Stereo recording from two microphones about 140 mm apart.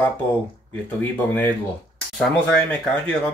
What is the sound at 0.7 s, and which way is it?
Speech, 10° left (ahead or behind).